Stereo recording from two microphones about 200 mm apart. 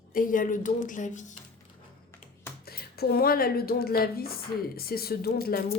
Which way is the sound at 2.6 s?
50° left (ahead or behind).